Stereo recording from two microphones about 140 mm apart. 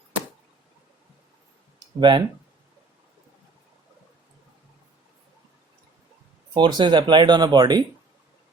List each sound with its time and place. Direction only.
2.0 s speech: 35° right (ahead or behind)
6.5 s speech: 35° right (ahead or behind)